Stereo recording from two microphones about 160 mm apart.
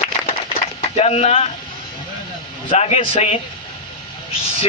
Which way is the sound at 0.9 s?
40° left (ahead or behind).